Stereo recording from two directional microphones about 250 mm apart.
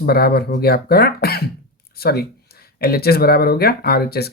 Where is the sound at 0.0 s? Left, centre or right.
Left.